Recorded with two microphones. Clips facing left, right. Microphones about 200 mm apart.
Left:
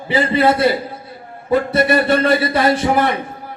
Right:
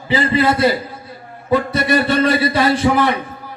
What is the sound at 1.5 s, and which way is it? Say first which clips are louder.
A man's voice: left 1 dB; 55° left (ahead or behind).